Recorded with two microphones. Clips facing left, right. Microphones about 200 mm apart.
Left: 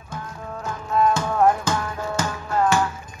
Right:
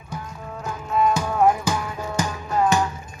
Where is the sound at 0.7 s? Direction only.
10° right (ahead or behind).